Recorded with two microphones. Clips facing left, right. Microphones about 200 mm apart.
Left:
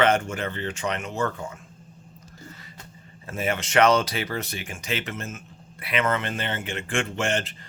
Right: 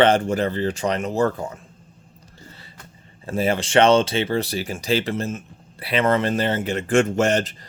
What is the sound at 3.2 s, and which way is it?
Speech, 30° right (ahead or behind).